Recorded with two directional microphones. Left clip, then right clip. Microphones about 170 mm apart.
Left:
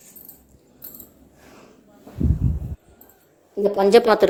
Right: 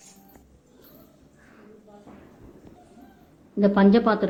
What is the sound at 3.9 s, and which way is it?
Speech, 55° left (ahead or behind).